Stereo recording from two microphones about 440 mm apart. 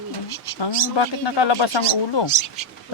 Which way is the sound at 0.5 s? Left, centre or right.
Left.